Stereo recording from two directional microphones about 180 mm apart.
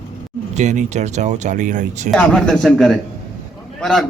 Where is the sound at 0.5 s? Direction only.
40° right (ahead or behind).